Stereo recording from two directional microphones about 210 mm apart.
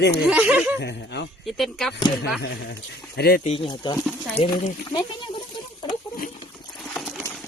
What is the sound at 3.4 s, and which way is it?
Speech, 25° left (ahead or behind).